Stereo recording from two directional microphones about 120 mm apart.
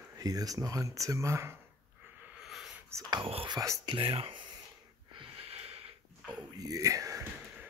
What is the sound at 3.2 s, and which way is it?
Speech, 50° right (ahead or behind).